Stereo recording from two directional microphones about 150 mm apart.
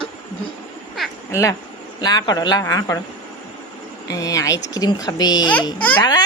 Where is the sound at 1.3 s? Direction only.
20° left (ahead or behind).